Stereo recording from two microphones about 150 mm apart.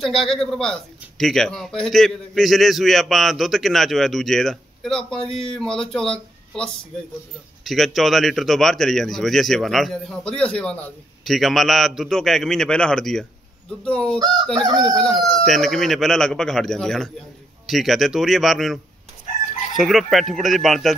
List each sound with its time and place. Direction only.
0.0 s speech: centre (ahead or behind)
14.7 s speech: 30° right (ahead or behind)
15.4 s speech: centre (ahead or behind)